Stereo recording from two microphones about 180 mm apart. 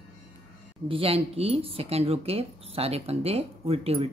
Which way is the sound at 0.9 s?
30° right (ahead or behind).